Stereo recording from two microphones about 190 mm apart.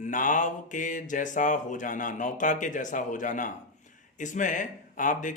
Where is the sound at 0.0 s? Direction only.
45° left (ahead or behind).